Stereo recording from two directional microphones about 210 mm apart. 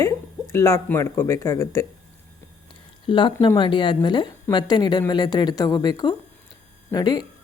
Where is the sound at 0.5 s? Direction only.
15° left (ahead or behind).